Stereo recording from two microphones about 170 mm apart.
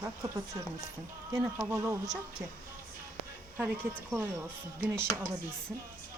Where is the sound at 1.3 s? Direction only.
15° right (ahead or behind).